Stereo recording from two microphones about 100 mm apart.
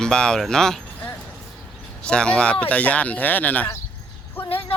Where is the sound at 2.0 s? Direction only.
10° left (ahead or behind).